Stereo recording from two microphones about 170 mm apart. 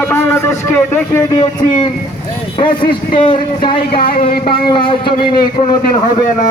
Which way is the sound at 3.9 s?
60° left (ahead or behind).